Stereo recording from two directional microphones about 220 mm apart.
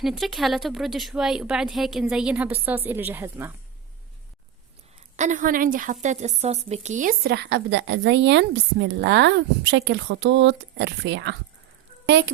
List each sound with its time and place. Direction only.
0.0 s speech: centre (ahead or behind)
5.1 s a woman's voice: 35° right (ahead or behind); by 12.3 s 55° right (ahead or behind)